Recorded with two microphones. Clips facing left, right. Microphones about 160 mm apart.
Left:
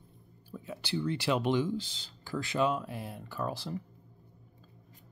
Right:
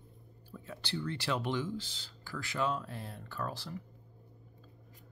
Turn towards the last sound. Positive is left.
turn(degrees=15)  # may be behind; listen again after turning